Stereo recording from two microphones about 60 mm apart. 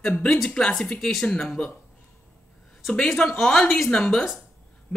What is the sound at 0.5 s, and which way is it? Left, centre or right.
Speech, centre.